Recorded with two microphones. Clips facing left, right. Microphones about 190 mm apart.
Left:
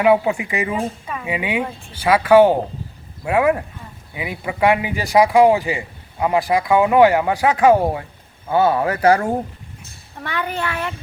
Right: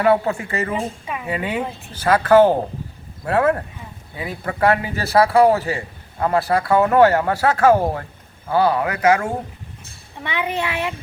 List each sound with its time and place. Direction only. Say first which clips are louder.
0.0 s speech: left 2 dB; 15° left (ahead or behind); by 9.3 s 35° left (ahead or behind)
10.2 s a child's voice: right 1 dB; centre (ahead or behind)